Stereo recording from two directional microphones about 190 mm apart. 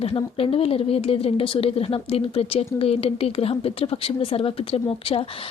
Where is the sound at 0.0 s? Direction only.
30° left (ahead or behind).